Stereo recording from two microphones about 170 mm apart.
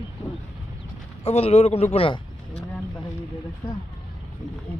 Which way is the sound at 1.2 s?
40° left (ahead or behind).